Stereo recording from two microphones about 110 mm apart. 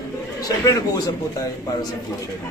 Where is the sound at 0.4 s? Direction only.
35° left (ahead or behind).